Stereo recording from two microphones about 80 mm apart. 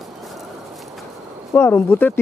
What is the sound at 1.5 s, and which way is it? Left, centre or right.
Speech, left.